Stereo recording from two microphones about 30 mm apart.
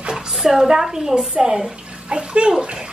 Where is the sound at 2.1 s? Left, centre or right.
Right.